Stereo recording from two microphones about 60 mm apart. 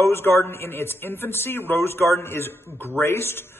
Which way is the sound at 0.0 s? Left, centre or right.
Left.